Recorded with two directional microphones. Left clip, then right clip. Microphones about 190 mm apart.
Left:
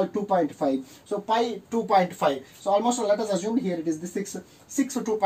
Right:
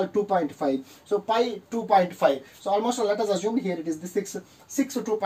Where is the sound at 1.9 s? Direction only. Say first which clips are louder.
Right 2 dB; 15° left (ahead or behind).